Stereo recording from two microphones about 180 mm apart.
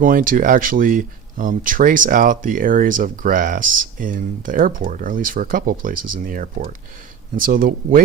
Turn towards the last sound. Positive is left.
turn(degrees=-50)  # may be behind; listen again after turning